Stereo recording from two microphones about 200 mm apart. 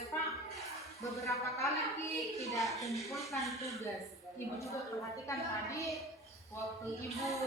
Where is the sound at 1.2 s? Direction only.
15° left (ahead or behind).